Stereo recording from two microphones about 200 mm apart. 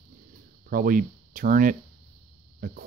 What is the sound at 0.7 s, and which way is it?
Speech, 45° right (ahead or behind).